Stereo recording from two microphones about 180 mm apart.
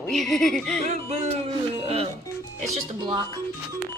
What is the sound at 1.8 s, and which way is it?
Music, 35° right (ahead or behind).